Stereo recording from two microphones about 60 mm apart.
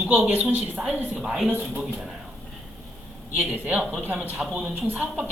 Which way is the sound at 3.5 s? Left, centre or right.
Right.